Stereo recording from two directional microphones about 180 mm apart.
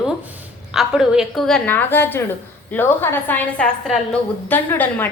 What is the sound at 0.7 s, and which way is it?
A woman's voice, 5° right (ahead or behind).